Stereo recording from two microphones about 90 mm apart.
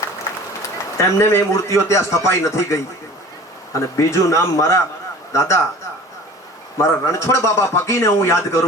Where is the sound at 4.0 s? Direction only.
35° left (ahead or behind).